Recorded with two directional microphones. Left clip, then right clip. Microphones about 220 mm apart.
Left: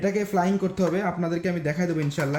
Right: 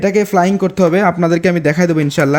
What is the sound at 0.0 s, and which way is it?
Speech, 45° right (ahead or behind).